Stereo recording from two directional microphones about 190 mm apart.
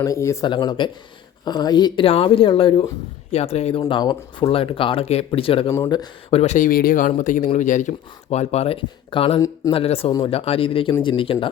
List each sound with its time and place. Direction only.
0.0 s speech: 15° left (ahead or behind)
6.4 s speech: 40° left (ahead or behind)